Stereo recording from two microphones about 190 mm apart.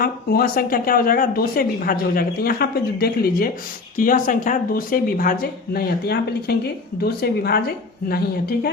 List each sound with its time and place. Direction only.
0.0 s speech: 50° left (ahead or behind)